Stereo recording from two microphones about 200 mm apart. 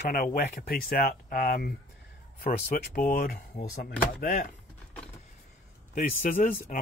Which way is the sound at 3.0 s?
45° left (ahead or behind).